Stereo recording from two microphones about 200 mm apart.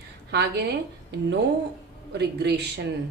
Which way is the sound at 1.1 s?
55° right (ahead or behind).